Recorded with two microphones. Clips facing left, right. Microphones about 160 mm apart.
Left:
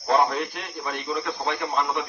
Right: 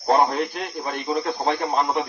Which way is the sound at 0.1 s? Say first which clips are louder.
Right 3 dB; 40° right (ahead or behind).